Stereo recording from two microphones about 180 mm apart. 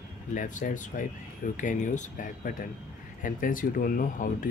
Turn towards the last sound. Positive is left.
turn(degrees=50)  # may be behind; listen again after turning